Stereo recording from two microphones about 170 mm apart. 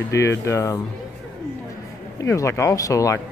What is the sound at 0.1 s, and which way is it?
Speech, 15° left (ahead or behind).